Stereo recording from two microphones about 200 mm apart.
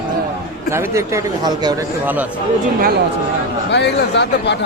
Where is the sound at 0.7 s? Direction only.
15° right (ahead or behind).